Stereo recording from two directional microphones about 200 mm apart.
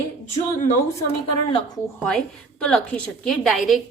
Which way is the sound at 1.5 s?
25° left (ahead or behind).